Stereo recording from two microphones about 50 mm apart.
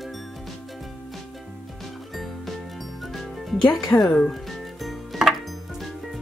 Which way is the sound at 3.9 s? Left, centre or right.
Left.